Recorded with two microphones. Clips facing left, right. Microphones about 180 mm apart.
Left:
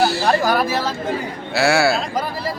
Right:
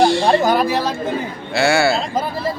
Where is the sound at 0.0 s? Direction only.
5° left (ahead or behind).